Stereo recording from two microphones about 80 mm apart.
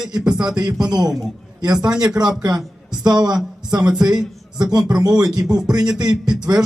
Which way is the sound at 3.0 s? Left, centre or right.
Right.